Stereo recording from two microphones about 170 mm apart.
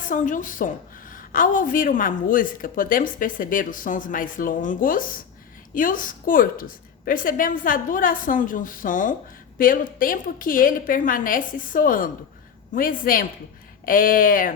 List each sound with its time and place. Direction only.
0.0 s a woman's voice: 50° left (ahead or behind)